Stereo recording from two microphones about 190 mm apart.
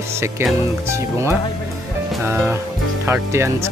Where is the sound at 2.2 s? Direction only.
10° right (ahead or behind).